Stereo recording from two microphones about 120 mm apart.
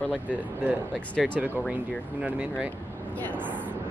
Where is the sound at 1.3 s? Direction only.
15° right (ahead or behind).